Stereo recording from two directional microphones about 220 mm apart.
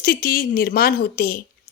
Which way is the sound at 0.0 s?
40° left (ahead or behind).